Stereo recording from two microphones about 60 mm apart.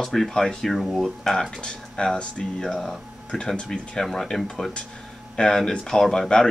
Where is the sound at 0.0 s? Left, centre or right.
Centre.